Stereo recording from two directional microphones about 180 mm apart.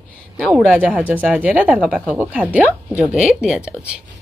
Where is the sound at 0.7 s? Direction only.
10° right (ahead or behind).